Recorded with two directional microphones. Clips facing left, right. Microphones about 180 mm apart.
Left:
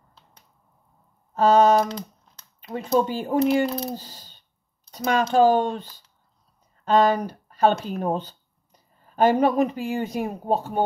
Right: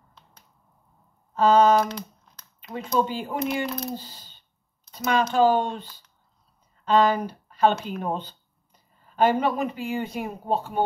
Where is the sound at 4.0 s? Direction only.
45° left (ahead or behind).